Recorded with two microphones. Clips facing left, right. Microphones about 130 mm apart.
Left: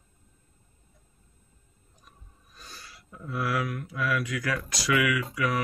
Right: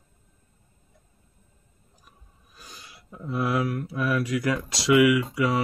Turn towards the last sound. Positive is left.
turn(degrees=-25)  # may be behind; listen again after turning